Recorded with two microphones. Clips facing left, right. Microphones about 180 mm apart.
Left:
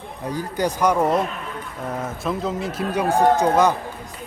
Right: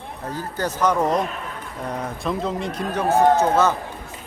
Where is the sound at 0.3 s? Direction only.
15° left (ahead or behind).